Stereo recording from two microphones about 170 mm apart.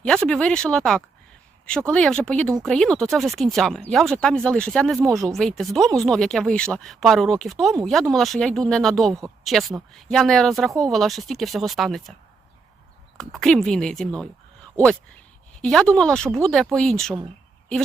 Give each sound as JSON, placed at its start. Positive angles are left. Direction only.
{"t": 0.0, "sound": "speech", "side_deg": 5}
{"t": 4.9, "sound": "speech", "side_deg": -15}
{"t": 5.2, "sound": "speech", "side_deg": 0}
{"t": 10.7, "sound": "speech", "side_deg": -20}
{"t": 10.9, "sound": "speech", "side_deg": 0}
{"t": 13.1, "sound": "speech", "side_deg": 0}
{"t": 15.6, "sound": "speech", "side_deg": 5}